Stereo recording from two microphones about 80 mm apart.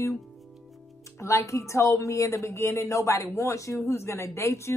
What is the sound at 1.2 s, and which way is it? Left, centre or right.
A woman's voice, left.